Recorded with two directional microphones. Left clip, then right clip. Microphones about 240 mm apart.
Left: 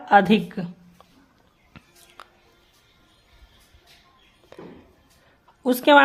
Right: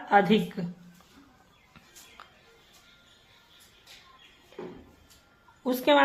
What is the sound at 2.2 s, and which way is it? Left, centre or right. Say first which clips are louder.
Music: left 6 dB; left.